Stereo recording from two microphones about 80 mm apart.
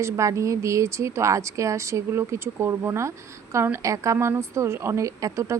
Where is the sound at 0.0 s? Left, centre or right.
Right.